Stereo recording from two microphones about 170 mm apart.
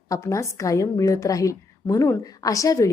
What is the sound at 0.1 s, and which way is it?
A woman's voice, 15° left (ahead or behind).